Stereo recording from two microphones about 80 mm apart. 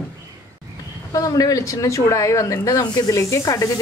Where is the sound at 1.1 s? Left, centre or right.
Left.